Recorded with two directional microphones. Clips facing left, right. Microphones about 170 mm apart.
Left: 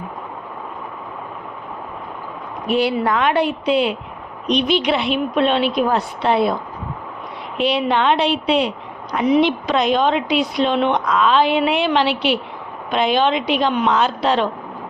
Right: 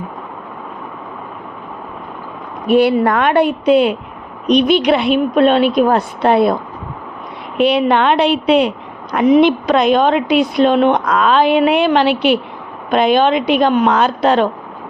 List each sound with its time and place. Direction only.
2.7 s speech: 55° right (ahead or behind)
7.6 s a woman's voice: 55° right (ahead or behind)